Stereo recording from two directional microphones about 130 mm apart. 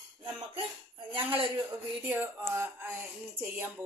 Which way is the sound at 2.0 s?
15° right (ahead or behind).